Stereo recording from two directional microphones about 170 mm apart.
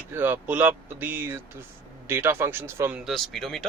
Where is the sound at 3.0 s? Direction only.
Centre (ahead or behind).